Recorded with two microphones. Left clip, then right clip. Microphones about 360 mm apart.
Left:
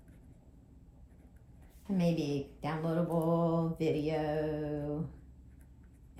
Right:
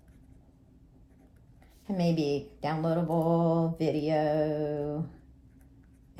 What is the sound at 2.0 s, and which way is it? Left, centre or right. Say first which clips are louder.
Mantra: right 5 dB; right.